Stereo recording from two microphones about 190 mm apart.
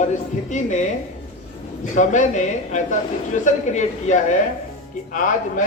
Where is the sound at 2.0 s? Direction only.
40° left (ahead or behind).